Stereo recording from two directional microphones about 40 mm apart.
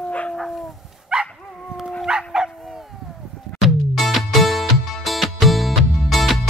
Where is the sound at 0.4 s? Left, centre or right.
Centre.